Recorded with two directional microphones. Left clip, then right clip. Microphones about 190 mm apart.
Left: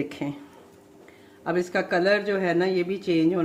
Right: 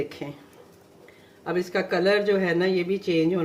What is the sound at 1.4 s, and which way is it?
Speech, 30° left (ahead or behind).